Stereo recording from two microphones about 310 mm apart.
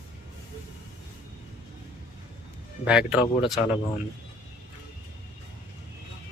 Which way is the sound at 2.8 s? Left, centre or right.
Centre.